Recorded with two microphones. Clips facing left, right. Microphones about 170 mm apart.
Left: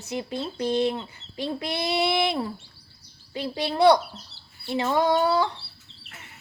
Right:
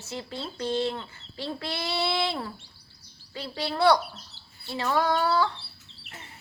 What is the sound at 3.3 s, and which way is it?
Chicken, 20° left (ahead or behind).